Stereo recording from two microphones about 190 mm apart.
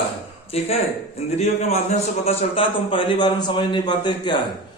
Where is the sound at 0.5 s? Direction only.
35° left (ahead or behind).